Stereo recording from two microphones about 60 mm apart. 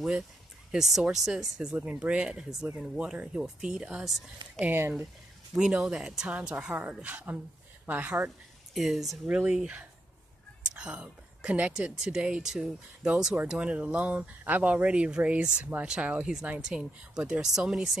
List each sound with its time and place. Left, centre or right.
0.7 s speech: centre
4.7 s speech: right
5.6 s speech: centre
6.2 s speech: right
8.7 s speech: centre
9.3 s a woman's voice: right; by 17.9 s centre